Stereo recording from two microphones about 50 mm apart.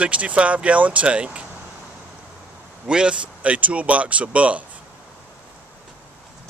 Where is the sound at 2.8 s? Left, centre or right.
Centre.